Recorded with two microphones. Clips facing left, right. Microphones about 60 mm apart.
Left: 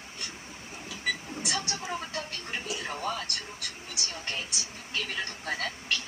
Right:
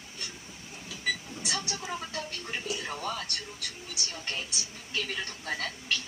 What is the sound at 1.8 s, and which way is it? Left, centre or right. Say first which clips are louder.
Television: left 1 dB; centre.